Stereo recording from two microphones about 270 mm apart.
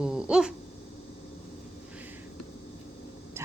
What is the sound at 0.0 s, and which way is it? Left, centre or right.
Dog, centre.